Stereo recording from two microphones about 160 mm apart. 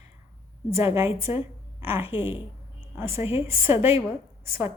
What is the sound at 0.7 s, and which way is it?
A woman's voice, 15° right (ahead or behind).